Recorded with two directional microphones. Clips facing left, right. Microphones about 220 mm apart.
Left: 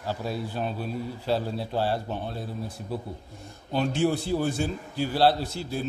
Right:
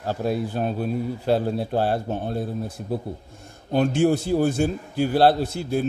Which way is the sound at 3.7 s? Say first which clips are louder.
Right 5 dB; 50° right (ahead or behind).